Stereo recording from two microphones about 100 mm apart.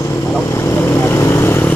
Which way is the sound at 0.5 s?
25° left (ahead or behind).